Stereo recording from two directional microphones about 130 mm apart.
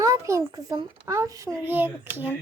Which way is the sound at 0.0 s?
25° right (ahead or behind).